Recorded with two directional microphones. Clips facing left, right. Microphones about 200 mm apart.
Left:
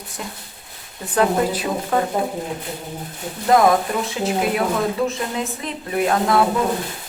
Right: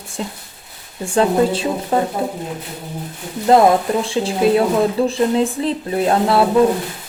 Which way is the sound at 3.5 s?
30° right (ahead or behind).